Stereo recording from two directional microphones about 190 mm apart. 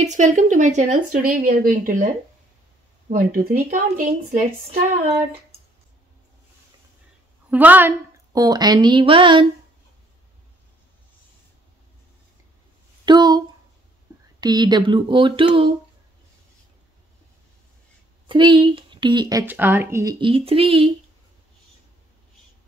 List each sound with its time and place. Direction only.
0.0 s speech: 40° right (ahead or behind)
3.1 s speech: 50° right (ahead or behind)
7.5 s speech: 10° right (ahead or behind); by 9.5 s 25° right (ahead or behind)
13.0 s a sound: 20° right (ahead or behind)
14.4 s speech: 20° right (ahead or behind)
18.2 s speech: 25° right (ahead or behind)
20.2 s speech: 30° right (ahead or behind)